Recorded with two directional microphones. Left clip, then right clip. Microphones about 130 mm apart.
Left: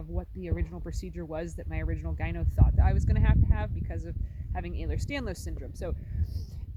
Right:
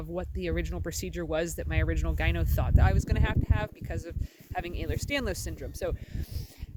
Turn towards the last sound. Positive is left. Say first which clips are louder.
# right 5 dB
turn(degrees=-25)  # may be behind; listen again after turning